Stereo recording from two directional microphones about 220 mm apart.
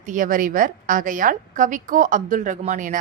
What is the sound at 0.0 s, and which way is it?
Speech, 35° right (ahead or behind).